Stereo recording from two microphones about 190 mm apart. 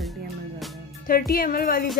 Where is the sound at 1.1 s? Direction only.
50° left (ahead or behind).